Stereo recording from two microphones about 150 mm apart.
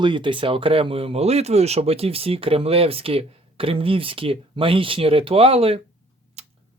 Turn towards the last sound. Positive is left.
turn(degrees=-45)  # may be behind; listen again after turning